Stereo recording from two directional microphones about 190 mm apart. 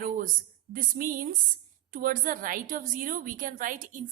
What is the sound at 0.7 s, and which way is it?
A woman's voice, 45° right (ahead or behind).